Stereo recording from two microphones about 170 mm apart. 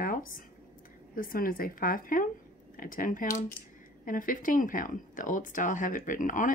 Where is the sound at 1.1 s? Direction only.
55° left (ahead or behind).